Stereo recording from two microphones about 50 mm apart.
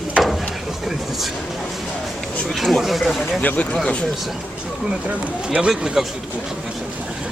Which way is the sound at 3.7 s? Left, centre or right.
Centre.